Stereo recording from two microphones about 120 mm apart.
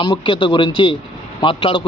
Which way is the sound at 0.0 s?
45° left (ahead or behind).